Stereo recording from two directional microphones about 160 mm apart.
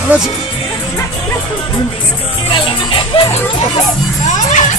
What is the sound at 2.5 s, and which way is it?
Music, 30° left (ahead or behind).